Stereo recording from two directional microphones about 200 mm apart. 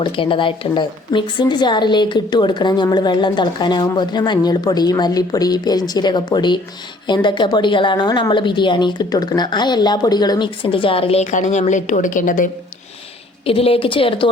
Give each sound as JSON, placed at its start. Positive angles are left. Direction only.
{"t": 0.0, "sound": "a woman's voice", "side_deg": 25}
{"t": 13.4, "sound": "a woman's voice", "side_deg": 30}